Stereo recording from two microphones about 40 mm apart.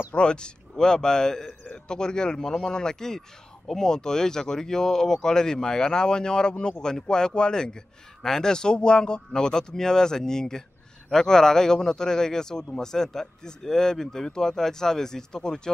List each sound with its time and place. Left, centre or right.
0.1 s a man's voice: left